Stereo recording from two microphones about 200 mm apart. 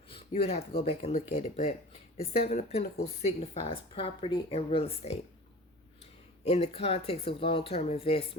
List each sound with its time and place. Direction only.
0.1 s a sound: 30° left (ahead or behind)
0.8 s speech: 30° left (ahead or behind)
6.4 s speech: 30° left (ahead or behind)